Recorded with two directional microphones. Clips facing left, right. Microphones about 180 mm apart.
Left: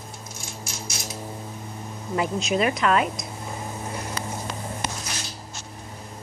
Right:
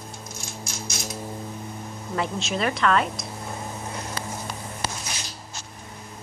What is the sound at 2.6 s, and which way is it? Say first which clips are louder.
Speech: left 1 dB; 10° left (ahead or behind).